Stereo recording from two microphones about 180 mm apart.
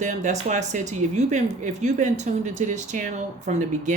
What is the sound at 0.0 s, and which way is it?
Speech, 40° right (ahead or behind).